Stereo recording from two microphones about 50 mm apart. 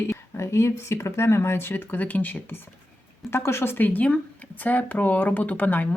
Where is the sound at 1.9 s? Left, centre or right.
Left.